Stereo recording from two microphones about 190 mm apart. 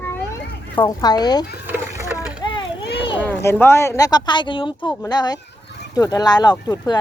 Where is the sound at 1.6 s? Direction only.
10° right (ahead or behind).